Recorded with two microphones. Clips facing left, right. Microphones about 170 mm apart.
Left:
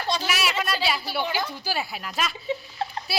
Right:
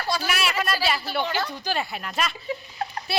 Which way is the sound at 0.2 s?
Centre (ahead or behind).